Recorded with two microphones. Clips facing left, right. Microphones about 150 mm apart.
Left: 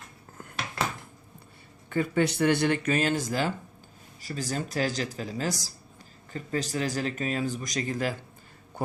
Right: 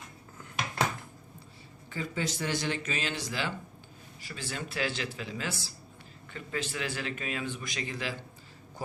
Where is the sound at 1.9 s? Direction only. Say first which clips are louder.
Left 9 dB; 60° left (ahead or behind).